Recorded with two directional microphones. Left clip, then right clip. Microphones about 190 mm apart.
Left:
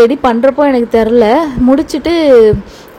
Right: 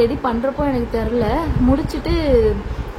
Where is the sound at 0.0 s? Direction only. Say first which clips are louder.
Left 10 dB; 35° left (ahead or behind).